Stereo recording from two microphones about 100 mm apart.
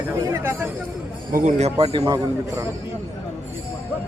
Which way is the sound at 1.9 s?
40° right (ahead or behind).